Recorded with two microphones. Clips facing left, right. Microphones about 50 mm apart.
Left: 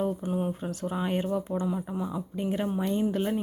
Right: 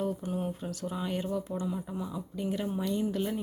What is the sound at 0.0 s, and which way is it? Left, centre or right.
Speech, left.